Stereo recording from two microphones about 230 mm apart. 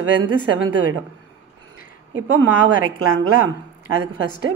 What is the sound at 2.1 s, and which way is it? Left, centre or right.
A woman's voice, right.